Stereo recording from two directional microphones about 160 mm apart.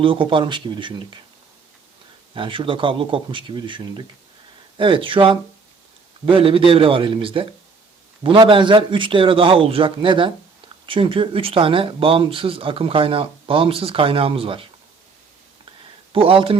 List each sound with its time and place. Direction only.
0.0 s speech: 35° right (ahead or behind)
2.3 s speech: 30° right (ahead or behind)
16.1 s speech: 35° right (ahead or behind)